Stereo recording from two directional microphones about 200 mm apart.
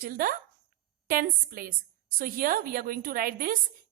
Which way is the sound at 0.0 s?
45° right (ahead or behind).